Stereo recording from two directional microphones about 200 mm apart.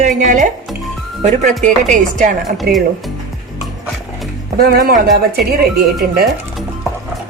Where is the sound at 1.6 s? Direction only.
35° right (ahead or behind).